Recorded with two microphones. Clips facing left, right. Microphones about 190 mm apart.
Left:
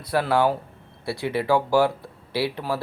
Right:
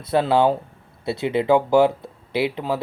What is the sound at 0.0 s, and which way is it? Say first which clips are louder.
Speech: right 3 dB; 20° right (ahead or behind).